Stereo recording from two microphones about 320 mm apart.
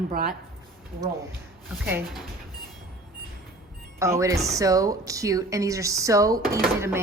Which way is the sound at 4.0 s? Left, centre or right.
Centre.